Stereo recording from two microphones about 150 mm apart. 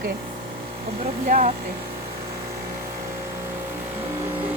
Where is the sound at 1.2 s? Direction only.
55° right (ahead or behind).